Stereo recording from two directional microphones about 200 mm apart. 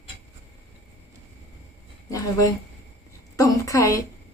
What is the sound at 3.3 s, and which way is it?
Speech, 15° left (ahead or behind).